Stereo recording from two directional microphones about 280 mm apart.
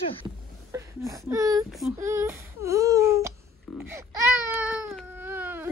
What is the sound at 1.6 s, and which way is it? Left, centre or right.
Female singing, centre.